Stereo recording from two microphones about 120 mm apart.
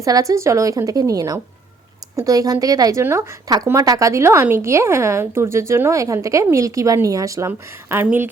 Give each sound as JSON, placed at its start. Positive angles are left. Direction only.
{"t": 0.0, "sound": "a woman's voice", "side_deg": -30}